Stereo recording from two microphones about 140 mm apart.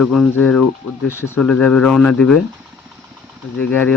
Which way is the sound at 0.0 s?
Centre (ahead or behind).